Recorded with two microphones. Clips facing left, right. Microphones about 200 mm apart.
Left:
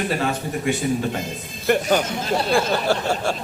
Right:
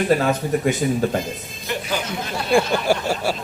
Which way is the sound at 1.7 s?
55° left (ahead or behind).